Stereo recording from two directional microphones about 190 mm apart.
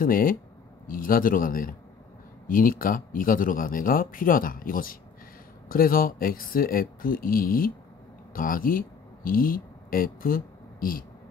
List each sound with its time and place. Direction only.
0.0 s speech: 50° left (ahead or behind)